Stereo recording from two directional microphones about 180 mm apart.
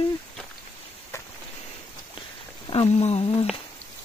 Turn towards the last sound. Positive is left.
turn(degrees=30)  # may be behind; listen again after turning